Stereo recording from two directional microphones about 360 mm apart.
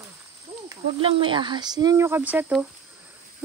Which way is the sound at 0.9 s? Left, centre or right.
Centre.